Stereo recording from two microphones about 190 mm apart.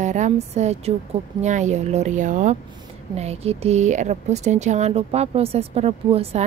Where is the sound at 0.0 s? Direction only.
40° right (ahead or behind).